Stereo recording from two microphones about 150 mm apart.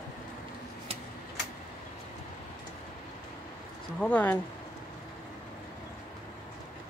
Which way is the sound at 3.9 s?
10° left (ahead or behind).